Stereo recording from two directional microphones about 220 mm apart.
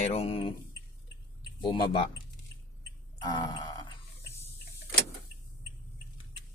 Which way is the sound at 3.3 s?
20° left (ahead or behind).